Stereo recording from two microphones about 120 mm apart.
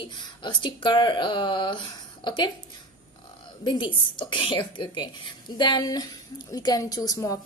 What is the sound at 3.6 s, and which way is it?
A woman's voice, 35° left (ahead or behind).